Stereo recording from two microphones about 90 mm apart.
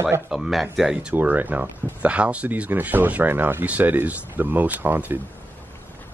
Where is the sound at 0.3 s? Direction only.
Centre (ahead or behind).